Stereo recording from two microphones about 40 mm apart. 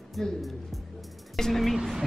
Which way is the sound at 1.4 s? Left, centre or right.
Centre.